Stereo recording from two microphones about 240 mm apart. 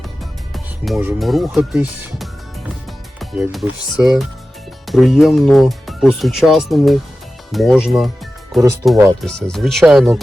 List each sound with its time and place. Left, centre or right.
0.9 s speech: centre